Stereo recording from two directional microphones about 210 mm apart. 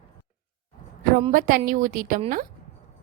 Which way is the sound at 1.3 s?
40° right (ahead or behind).